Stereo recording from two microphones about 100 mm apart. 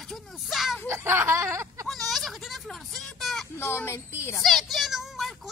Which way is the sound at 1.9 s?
Centre (ahead or behind).